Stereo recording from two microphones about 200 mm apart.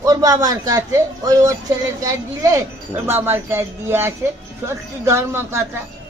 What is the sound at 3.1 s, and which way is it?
Speech, 10° right (ahead or behind).